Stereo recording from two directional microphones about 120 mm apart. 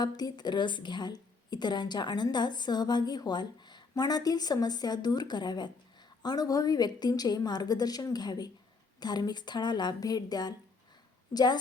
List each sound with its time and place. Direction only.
0.0 s a woman's voice: 35° left (ahead or behind)